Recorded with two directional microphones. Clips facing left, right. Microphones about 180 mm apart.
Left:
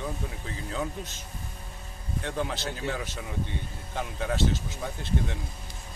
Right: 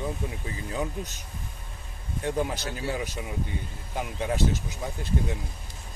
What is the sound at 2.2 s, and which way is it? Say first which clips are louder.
Speech: right 3 dB; 15° right (ahead or behind).